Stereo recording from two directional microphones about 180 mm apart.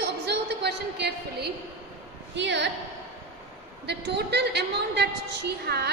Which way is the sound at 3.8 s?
70° right (ahead or behind).